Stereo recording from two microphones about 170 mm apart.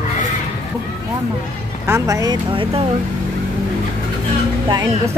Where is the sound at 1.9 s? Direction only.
20° right (ahead or behind).